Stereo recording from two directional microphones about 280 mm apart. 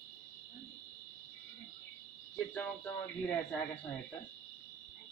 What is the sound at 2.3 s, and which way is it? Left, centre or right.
Speech, centre.